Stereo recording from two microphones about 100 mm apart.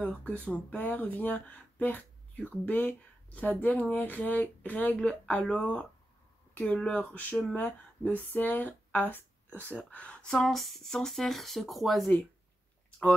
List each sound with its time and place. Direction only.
0.0 s speech: 15° left (ahead or behind)